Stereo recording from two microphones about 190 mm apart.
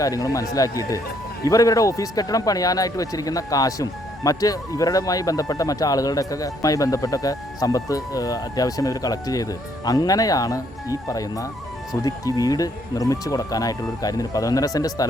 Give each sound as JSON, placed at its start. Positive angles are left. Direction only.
{"t": 0.0, "sound": "speech", "side_deg": 20}